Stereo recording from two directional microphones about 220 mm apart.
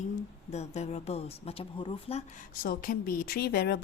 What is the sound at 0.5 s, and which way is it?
Speech, 30° left (ahead or behind).